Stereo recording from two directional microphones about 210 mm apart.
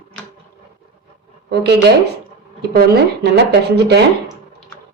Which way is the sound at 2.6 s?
50° right (ahead or behind).